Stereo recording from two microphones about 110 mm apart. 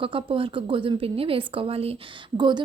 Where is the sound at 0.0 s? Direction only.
55° right (ahead or behind).